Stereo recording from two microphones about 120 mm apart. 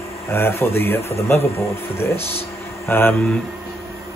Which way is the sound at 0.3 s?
20° left (ahead or behind).